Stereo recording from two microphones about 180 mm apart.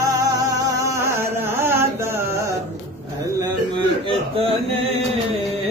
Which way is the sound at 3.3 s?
30° right (ahead or behind).